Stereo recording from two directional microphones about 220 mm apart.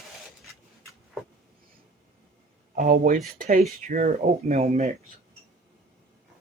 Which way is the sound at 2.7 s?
40° right (ahead or behind).